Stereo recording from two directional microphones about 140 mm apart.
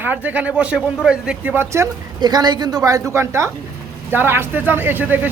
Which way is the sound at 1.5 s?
20° right (ahead or behind).